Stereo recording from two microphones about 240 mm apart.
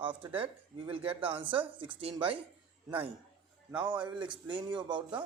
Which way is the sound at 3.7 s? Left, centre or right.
Centre.